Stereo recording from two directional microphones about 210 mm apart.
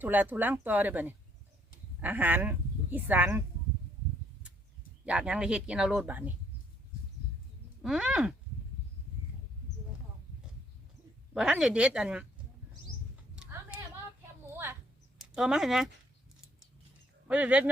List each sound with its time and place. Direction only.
0.0 s speech: 10° right (ahead or behind)
5.0 s speech: 5° right (ahead or behind)
7.8 s speech: 5° right (ahead or behind)
11.3 s speech: 5° right (ahead or behind)
13.3 s a sound: 5° right (ahead or behind)
15.2 s speech: centre (ahead or behind)
17.2 s speech: 5° right (ahead or behind)